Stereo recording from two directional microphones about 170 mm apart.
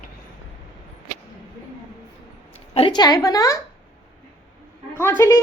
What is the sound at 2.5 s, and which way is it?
A woman's voice, 35° left (ahead or behind).